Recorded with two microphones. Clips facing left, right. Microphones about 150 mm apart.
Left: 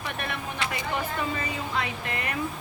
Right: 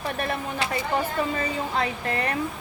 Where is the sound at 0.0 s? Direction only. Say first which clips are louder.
Right 5 dB; 35° right (ahead or behind).